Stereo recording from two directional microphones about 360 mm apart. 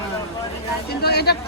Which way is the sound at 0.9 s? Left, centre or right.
Left.